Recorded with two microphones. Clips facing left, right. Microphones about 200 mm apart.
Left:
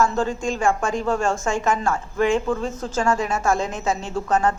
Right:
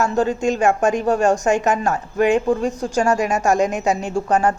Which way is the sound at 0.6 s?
40° right (ahead or behind).